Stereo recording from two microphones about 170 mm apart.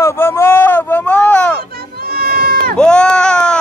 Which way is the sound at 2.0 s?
60° right (ahead or behind).